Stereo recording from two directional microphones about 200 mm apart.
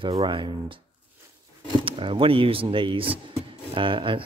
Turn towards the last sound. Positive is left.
turn(degrees=-25)  # may be behind; listen again after turning